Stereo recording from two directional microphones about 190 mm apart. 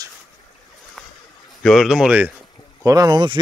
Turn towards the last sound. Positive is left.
turn(degrees=-20)  # may be behind; listen again after turning